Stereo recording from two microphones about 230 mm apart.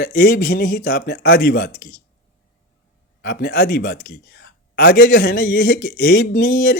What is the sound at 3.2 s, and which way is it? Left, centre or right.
Speech, left.